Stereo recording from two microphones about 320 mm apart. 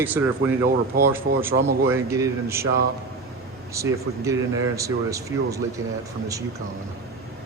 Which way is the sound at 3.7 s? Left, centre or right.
Centre.